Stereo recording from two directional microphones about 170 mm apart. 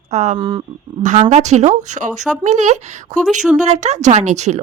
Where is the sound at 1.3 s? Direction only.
45° right (ahead or behind).